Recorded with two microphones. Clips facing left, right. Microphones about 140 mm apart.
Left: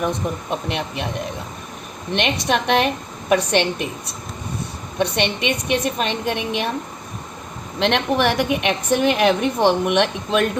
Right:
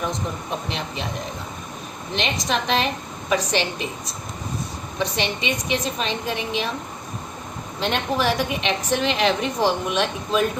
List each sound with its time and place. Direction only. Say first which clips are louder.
0.7 s a woman's voice: left 4 dB; 60° left (ahead or behind)
2.1 s a woman's voice: left 4 dB; 60° left (ahead or behind)
7.8 s a woman's voice: left 5 dB; 80° left